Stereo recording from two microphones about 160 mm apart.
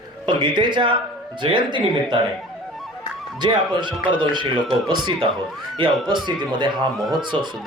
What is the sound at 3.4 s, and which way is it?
Speech, 30° right (ahead or behind).